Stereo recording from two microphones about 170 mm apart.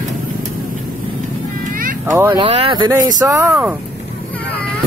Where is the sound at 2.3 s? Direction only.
35° right (ahead or behind).